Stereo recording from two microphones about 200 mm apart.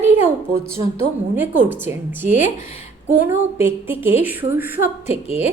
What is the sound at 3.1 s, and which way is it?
A woman's voice, 10° right (ahead or behind).